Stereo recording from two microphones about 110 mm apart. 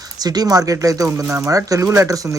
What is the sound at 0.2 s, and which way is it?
Speech, 35° right (ahead or behind).